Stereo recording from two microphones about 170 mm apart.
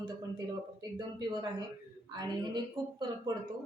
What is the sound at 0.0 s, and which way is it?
A woman's voice, 25° right (ahead or behind).